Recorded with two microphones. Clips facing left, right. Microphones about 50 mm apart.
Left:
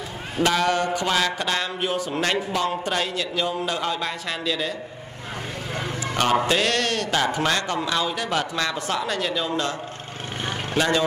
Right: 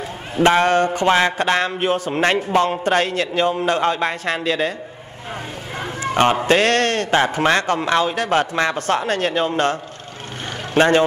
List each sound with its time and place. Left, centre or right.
0.4 s speech: right
5.8 s a sound: right
6.4 s speech: right
8.7 s speech: right
10.8 s speech: right